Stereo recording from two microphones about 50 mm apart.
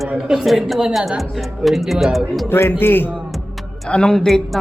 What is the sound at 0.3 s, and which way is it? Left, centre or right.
A woman's voice, centre.